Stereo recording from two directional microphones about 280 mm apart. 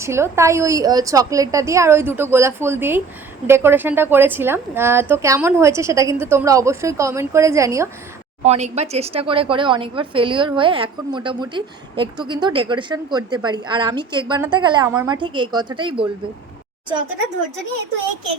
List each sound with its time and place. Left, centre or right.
0.0 s speech: centre
8.4 s speech: right